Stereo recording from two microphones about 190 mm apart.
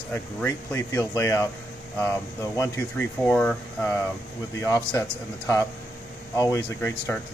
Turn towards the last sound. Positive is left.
turn(degrees=15)  # may be behind; listen again after turning